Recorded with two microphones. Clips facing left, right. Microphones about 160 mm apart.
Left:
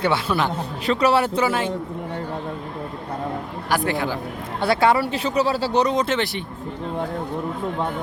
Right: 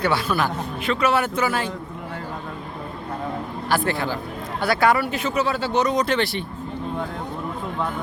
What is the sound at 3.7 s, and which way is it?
Speech, 15° left (ahead or behind).